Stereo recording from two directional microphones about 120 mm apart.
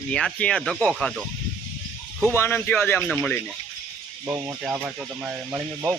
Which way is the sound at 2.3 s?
20° left (ahead or behind).